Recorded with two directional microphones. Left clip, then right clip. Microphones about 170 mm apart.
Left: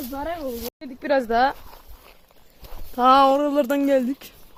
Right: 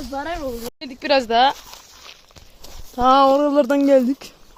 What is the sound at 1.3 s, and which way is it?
Speech, centre (ahead or behind).